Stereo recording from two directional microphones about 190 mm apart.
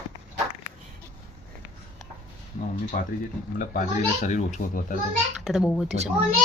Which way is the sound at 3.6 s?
40° left (ahead or behind).